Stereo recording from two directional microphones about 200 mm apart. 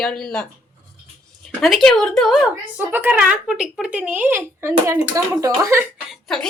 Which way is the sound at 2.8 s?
10° right (ahead or behind).